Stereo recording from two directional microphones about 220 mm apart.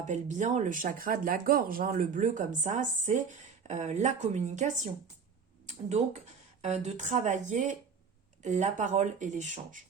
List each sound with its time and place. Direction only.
0.1 s speech: 35° right (ahead or behind)
6.6 s speech: 30° right (ahead or behind)